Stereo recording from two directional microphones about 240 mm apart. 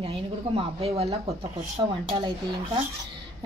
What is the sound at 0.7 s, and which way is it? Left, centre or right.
Speech, right.